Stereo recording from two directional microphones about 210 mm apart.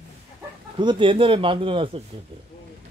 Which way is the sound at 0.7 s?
20° right (ahead or behind).